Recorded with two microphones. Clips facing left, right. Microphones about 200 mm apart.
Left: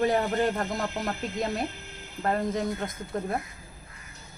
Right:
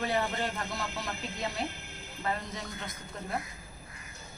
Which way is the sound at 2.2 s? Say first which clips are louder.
Left 9 dB; 50° left (ahead or behind).